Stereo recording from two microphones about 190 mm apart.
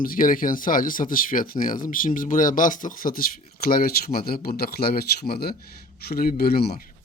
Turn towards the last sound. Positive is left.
turn(degrees=55)  # may be behind; listen again after turning